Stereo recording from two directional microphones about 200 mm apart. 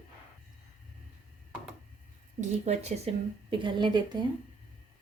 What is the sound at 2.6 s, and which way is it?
A woman's voice, 30° right (ahead or behind).